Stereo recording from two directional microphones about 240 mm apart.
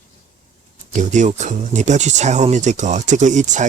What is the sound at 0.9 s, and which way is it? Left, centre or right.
Speech, right.